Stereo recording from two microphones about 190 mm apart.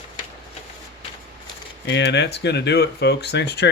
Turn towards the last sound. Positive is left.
turn(degrees=60)  # may be behind; listen again after turning